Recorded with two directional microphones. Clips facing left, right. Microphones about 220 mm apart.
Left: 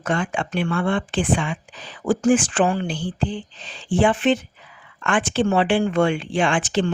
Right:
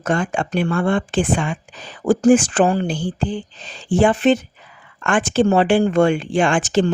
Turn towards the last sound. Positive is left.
turn(degrees=-45)  # may be behind; listen again after turning